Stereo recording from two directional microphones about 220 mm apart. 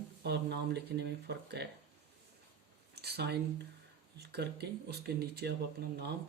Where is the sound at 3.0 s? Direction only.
50° right (ahead or behind).